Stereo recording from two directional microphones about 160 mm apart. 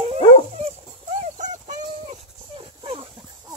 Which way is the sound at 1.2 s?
50° right (ahead or behind).